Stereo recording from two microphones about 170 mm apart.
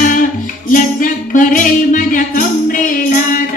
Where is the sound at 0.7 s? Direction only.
50° left (ahead or behind).